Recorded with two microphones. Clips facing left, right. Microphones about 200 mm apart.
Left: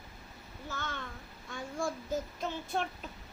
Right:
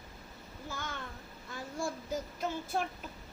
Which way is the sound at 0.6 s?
10° right (ahead or behind).